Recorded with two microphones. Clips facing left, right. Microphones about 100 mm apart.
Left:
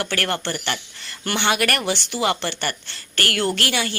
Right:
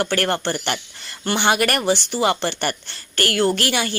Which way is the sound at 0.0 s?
40° right (ahead or behind).